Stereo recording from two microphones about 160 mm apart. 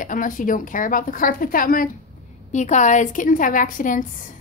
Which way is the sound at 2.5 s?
50° left (ahead or behind).